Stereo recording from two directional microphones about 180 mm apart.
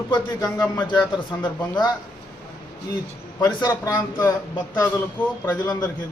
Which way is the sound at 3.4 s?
20° left (ahead or behind).